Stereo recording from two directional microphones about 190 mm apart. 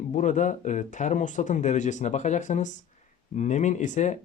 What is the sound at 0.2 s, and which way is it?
Speech, 40° left (ahead or behind).